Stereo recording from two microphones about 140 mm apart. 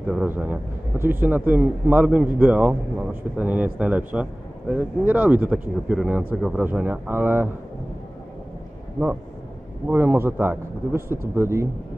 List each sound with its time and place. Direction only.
0.0 s speech: 5° right (ahead or behind)
9.8 s speech: 15° right (ahead or behind)